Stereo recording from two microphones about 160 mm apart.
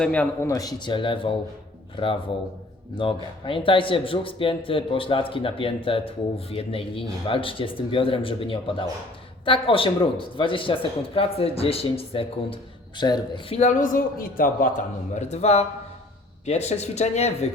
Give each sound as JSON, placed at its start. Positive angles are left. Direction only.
{"t": 0.0, "sound": "a man's voice", "side_deg": 10}
{"t": 0.4, "sound": "speech", "side_deg": 20}
{"t": 2.9, "sound": "a man's voice", "side_deg": 30}
{"t": 13.5, "sound": "a man's voice", "side_deg": 50}
{"t": 15.1, "sound": "speech", "side_deg": 45}